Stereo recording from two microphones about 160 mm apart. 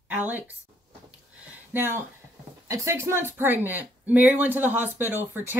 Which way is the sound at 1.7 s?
15° right (ahead or behind).